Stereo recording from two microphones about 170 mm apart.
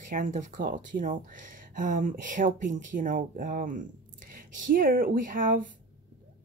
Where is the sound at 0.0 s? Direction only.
50° right (ahead or behind).